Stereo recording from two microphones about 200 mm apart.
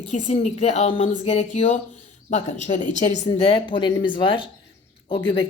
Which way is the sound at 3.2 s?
25° left (ahead or behind).